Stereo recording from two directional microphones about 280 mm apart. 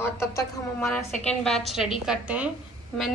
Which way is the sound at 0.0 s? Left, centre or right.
Centre.